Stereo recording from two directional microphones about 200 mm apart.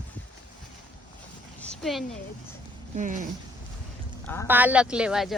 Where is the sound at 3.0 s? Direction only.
40° right (ahead or behind).